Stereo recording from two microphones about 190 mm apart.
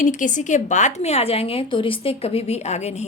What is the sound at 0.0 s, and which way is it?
A woman's voice, 40° left (ahead or behind).